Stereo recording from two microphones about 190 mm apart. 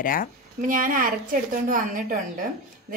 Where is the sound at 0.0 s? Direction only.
45° left (ahead or behind).